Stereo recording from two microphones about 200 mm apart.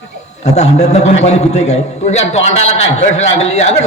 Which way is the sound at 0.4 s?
35° left (ahead or behind).